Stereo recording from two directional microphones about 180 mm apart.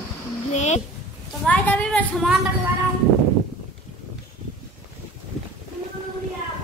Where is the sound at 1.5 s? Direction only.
10° left (ahead or behind).